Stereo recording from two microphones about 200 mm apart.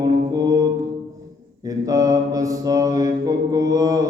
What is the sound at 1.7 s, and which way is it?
Mantra, 15° right (ahead or behind).